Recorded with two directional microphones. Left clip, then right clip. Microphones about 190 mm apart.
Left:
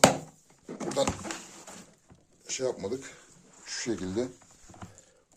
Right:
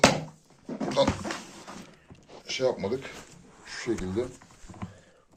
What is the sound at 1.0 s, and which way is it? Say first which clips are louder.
Speech: right 4 dB; 90° left.